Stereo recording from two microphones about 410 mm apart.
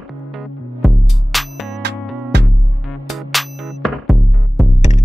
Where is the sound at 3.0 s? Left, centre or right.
Centre.